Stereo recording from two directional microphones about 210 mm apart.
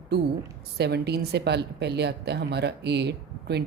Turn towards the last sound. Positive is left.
turn(degrees=-50)  # may be behind; listen again after turning